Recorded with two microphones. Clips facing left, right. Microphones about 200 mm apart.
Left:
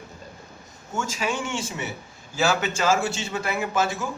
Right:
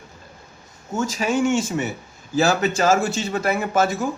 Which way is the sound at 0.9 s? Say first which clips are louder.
Right 6 dB; 40° right (ahead or behind).